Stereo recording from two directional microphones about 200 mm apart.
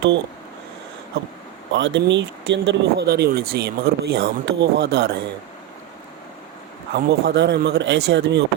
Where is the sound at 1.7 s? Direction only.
65° right (ahead or behind).